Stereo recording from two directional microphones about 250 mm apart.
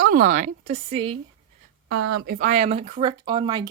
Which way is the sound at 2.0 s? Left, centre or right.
Right.